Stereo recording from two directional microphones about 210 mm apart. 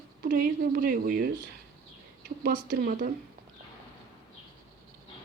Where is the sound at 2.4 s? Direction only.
45° right (ahead or behind).